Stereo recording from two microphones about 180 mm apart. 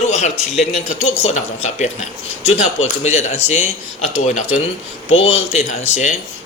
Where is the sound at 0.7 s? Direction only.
35° left (ahead or behind).